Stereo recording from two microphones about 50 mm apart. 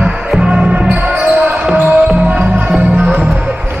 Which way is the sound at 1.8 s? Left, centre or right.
Right.